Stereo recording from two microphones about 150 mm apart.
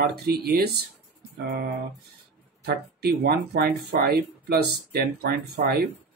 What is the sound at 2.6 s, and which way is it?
Speech, 90° right.